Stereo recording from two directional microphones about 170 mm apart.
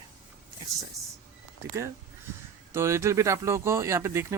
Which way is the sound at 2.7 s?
15° right (ahead or behind).